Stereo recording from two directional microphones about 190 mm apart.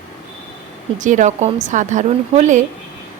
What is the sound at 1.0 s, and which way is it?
Speech, 40° right (ahead or behind).